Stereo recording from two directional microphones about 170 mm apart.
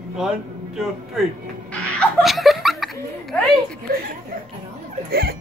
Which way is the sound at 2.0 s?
5° left (ahead or behind).